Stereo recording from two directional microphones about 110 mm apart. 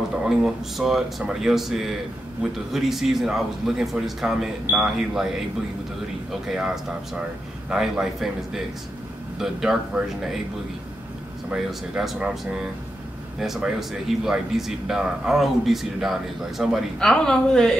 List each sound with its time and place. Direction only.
0.2 s a man's voice: 5° right (ahead or behind)
6.4 s a man's voice: 5° right (ahead or behind)
11.5 s a man's voice: 5° right (ahead or behind)